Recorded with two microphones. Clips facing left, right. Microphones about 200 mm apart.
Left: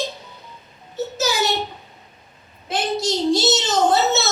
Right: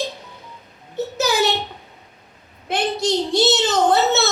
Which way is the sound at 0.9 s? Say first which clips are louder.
Right 2 dB; 60° right (ahead or behind).